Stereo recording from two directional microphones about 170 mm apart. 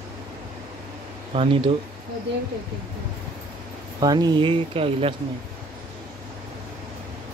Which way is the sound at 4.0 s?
25° right (ahead or behind).